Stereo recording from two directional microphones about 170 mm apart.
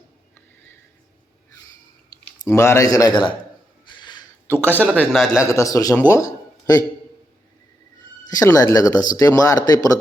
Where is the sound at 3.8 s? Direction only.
25° left (ahead or behind).